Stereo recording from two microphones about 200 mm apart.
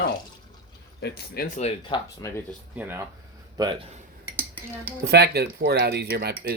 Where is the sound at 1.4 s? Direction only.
40° left (ahead or behind).